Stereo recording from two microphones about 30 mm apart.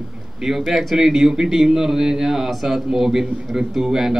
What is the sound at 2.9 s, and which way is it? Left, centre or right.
Speech, centre.